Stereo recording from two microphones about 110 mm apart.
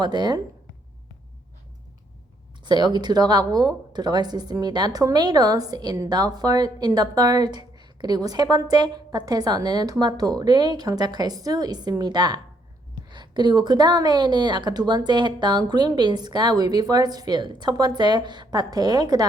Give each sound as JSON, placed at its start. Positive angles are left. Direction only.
{"t": 0.0, "sound": "a woman's voice", "side_deg": -40}
{"t": 2.6, "sound": "a woman's voice", "side_deg": -40}